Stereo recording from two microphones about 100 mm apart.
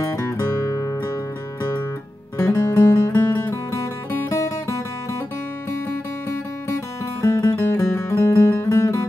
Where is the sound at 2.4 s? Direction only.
40° left (ahead or behind).